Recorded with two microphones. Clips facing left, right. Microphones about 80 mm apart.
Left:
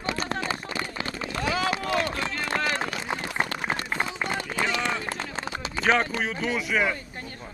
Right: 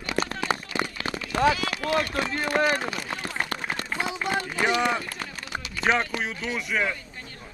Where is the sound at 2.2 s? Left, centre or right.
Centre.